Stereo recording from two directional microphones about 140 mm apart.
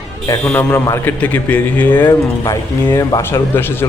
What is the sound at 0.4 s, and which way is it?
Speech, 10° left (ahead or behind).